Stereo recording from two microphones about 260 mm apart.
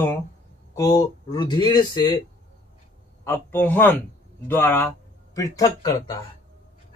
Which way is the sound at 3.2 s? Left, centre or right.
Centre.